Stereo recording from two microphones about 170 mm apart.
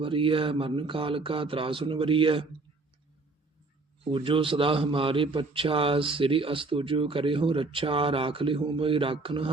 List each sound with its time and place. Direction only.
0.0 s a man's voice: 30° right (ahead or behind)
4.0 s a man's voice: 30° right (ahead or behind)